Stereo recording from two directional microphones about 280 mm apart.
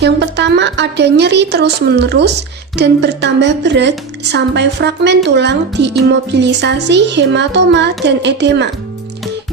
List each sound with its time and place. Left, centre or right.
0.0 s a woman's voice: right